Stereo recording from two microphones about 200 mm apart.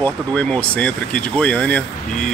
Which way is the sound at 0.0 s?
5° left (ahead or behind).